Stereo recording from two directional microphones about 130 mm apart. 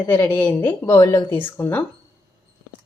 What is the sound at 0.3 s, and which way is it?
A woman's voice, 15° left (ahead or behind).